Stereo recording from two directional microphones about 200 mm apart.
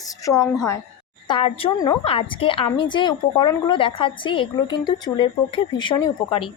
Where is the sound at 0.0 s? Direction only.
15° left (ahead or behind).